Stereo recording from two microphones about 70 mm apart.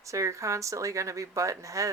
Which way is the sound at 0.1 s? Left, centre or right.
Right.